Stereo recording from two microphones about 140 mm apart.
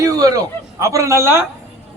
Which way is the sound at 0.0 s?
25° right (ahead or behind).